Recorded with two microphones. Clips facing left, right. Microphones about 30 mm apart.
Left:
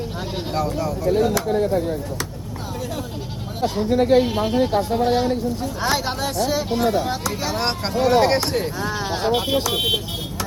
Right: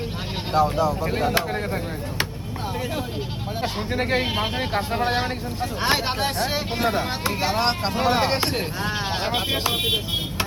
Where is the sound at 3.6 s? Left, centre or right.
Right.